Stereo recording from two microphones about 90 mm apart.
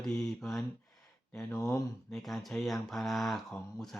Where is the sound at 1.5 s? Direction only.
40° left (ahead or behind).